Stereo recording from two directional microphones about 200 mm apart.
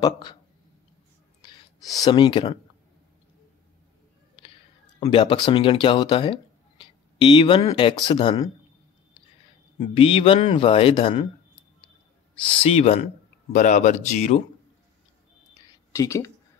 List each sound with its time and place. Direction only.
0.0 s speech: 20° left (ahead or behind)
2.0 s speech: 25° left (ahead or behind)
5.0 s speech: 25° left (ahead or behind)
9.8 s speech: 25° left (ahead or behind)
12.6 s speech: 30° left (ahead or behind)
15.9 s speech: 15° left (ahead or behind)